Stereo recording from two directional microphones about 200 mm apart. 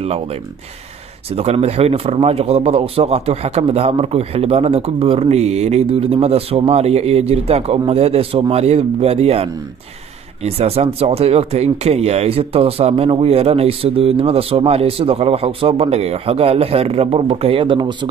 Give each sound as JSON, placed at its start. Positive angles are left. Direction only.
{"t": 0.0, "sound": "speech", "side_deg": -30}